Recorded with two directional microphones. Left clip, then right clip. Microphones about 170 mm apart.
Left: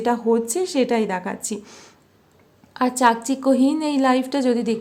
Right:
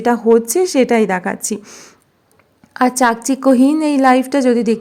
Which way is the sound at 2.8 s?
35° right (ahead or behind).